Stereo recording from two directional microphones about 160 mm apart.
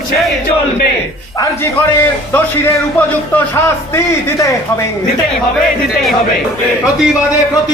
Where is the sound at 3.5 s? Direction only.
15° left (ahead or behind).